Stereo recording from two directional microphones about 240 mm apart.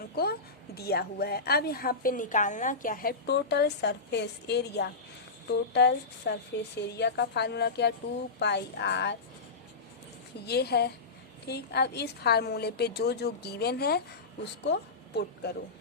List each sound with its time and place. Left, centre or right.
0.8 s a woman's voice: left
10.4 s a woman's voice: left